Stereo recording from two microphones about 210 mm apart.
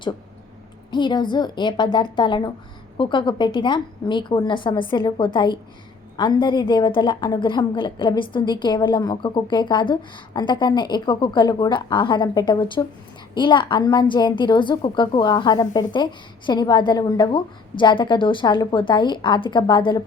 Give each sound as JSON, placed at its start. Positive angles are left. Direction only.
{"t": 0.9, "sound": "a woman's voice", "side_deg": 20}